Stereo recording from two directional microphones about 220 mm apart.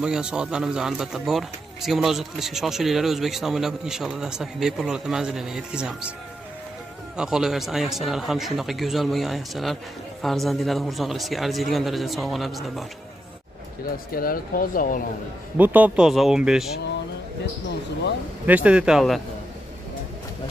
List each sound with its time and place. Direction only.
0.0 s speech: 5° right (ahead or behind)
7.2 s speech: centre (ahead or behind)
14.1 s speech: 40° left (ahead or behind)
15.5 s speech: 5° right (ahead or behind)
18.4 s speech: 5° right (ahead or behind)